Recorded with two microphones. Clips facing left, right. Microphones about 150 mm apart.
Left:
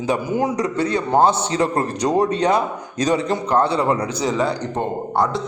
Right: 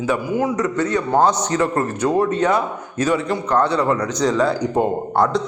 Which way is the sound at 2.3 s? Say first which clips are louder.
Even; 15° left (ahead or behind).